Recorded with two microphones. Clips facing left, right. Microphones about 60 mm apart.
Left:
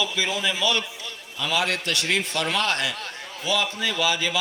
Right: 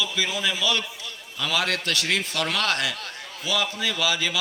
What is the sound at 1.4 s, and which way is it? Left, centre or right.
Speech, centre.